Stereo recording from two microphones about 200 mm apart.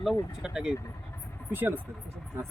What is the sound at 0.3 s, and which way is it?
Speech, 5° right (ahead or behind).